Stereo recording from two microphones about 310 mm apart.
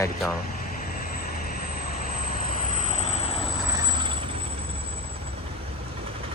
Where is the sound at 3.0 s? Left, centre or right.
Centre.